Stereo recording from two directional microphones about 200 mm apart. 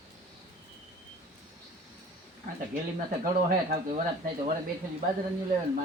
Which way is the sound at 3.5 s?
40° right (ahead or behind).